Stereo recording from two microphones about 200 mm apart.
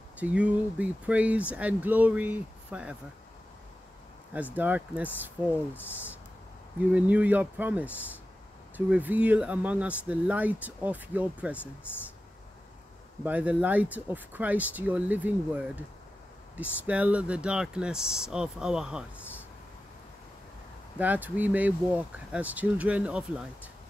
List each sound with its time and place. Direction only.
0.2 s speech: 5° right (ahead or behind)
4.6 s speech: 10° right (ahead or behind)
6.8 s speech: 5° right (ahead or behind)
13.2 s speech: 5° right (ahead or behind)
21.0 s speech: 10° right (ahead or behind)